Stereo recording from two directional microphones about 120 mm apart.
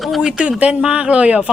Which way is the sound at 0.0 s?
Centre (ahead or behind).